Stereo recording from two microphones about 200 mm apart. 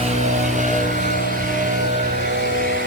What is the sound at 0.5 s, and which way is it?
Vehicle, 40° right (ahead or behind).